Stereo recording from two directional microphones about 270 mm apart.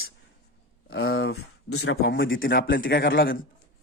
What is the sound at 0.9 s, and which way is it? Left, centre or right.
A man's voice, left.